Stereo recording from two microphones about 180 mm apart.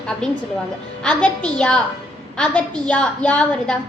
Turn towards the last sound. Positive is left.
turn(degrees=5)  # may be behind; listen again after turning